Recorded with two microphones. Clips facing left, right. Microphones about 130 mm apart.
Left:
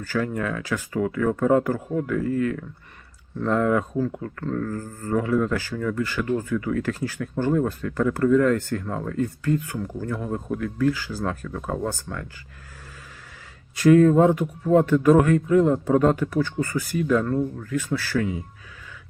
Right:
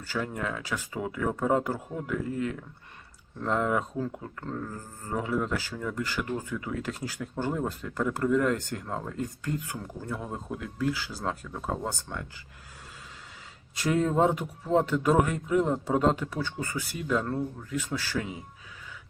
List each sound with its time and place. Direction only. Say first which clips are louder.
0.1 s speech: left 6 dB; 20° right (ahead or behind)
13.7 s speech: left 10 dB; 20° right (ahead or behind)